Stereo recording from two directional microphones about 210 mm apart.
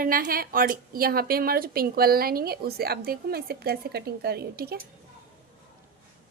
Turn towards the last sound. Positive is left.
turn(degrees=-50)  # may be behind; listen again after turning